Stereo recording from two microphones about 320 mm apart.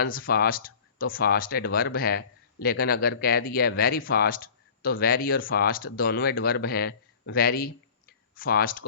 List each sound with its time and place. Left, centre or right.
0.0 s speech: left